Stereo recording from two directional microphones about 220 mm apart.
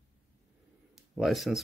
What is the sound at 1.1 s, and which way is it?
Speech, centre (ahead or behind).